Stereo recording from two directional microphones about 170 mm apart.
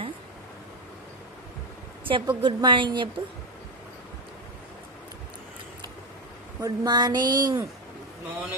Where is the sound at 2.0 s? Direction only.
30° right (ahead or behind).